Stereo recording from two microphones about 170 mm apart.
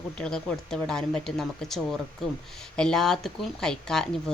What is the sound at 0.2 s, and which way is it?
A woman's voice, 5° left (ahead or behind).